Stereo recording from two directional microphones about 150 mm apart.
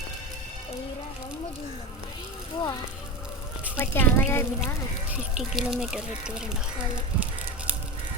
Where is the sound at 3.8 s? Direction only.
15° left (ahead or behind).